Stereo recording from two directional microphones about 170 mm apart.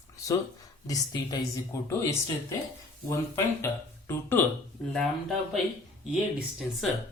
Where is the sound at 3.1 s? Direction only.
15° left (ahead or behind).